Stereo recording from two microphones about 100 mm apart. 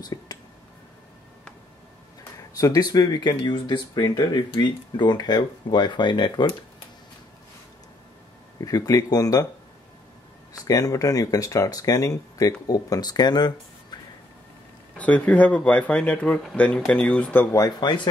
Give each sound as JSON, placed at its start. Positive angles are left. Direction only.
{"t": 0.0, "sound": "a sound", "side_deg": 40}
{"t": 2.6, "sound": "speech", "side_deg": 40}
{"t": 8.5, "sound": "speech", "side_deg": 35}
{"t": 10.5, "sound": "speech", "side_deg": 35}
{"t": 15.0, "sound": "speech", "side_deg": 15}
{"t": 17.6, "sound": "speech", "side_deg": 40}